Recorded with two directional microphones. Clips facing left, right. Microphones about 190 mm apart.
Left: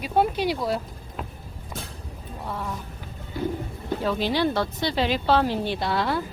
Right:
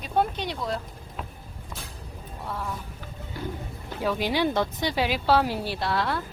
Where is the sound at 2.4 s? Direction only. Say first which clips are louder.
Left 1 dB; centre (ahead or behind).